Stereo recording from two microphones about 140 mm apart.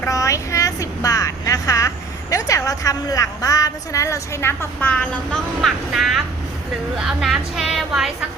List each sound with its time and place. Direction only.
0.0 s vehicle: 25° left (ahead or behind)
2.3 s a woman's voice: 25° left (ahead or behind); by 8.1 s centre (ahead or behind)